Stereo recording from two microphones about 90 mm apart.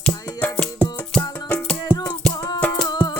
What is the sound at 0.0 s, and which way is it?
Music, 15° left (ahead or behind).